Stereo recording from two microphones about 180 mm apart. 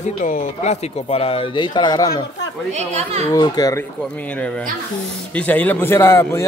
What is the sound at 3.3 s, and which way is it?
Speech, 20° left (ahead or behind).